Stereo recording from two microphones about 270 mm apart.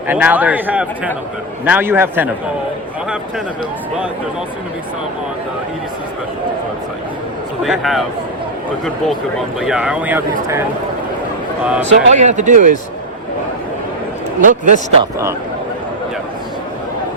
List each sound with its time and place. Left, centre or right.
0.1 s a man's voice: centre
7.6 s speech: centre
9.6 s speech: centre
11.8 s speech: right
14.4 s speech: right